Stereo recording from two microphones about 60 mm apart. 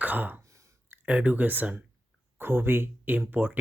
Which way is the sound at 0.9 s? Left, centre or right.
Right.